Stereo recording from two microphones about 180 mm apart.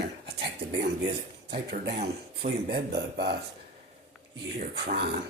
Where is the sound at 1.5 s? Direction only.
65° right (ahead or behind).